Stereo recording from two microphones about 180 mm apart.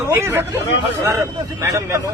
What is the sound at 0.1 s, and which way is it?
Speech, 15° right (ahead or behind).